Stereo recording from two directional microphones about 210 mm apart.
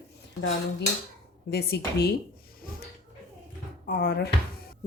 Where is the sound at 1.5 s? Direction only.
50° left (ahead or behind).